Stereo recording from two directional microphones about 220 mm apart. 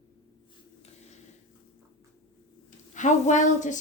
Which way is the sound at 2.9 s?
35° left (ahead or behind).